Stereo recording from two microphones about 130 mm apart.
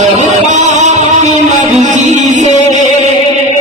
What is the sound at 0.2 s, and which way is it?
Music, 65° right (ahead or behind).